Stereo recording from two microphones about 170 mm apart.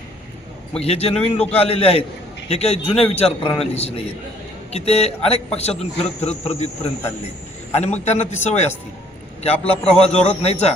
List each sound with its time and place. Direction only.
0.8 s a man's voice: 35° left (ahead or behind)